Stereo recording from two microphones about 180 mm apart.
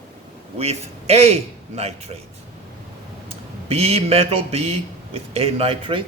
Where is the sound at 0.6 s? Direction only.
35° right (ahead or behind).